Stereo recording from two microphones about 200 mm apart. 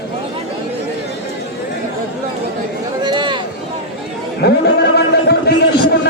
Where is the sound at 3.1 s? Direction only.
20° right (ahead or behind).